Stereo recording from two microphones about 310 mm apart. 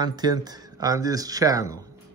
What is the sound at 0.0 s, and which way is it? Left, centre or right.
Speech, centre.